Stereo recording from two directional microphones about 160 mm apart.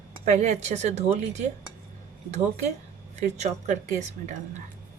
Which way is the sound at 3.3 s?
45° right (ahead or behind).